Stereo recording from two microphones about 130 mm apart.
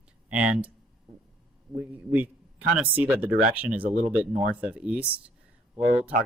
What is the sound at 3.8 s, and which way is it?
Speech, 60° right (ahead or behind).